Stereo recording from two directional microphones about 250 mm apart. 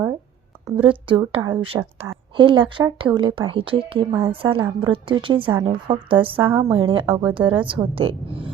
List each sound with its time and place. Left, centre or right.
0.8 s a woman's voice: centre
6.5 s a woman's voice: centre
6.8 s a woman's voice: centre